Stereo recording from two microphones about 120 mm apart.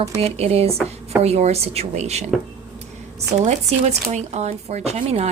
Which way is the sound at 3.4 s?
75° right (ahead or behind).